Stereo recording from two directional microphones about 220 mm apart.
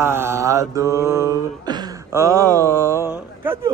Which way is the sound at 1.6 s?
15° right (ahead or behind).